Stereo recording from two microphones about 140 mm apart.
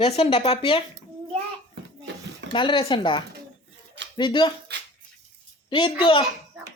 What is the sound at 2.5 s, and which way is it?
Speech, 35° left (ahead or behind).